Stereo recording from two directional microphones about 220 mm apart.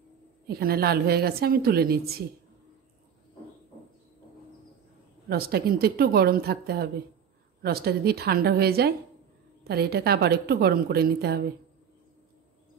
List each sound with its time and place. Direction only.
0.5 s a woman's voice: 45° right (ahead or behind)
5.3 s a woman's voice: 45° right (ahead or behind)